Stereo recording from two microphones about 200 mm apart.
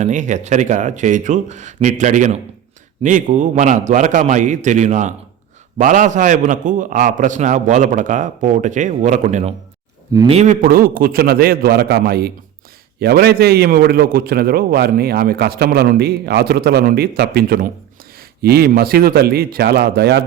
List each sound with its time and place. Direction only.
0.0 s a man's voice: 35° right (ahead or behind); by 20.2 s 55° right (ahead or behind)